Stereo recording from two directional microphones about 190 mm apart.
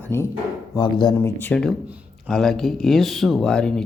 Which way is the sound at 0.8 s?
25° left (ahead or behind).